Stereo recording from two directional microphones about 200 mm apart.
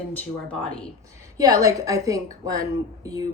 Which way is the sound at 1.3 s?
15° right (ahead or behind).